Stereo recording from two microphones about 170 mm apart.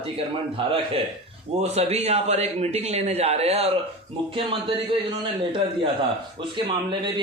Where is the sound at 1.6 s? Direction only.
40° right (ahead or behind).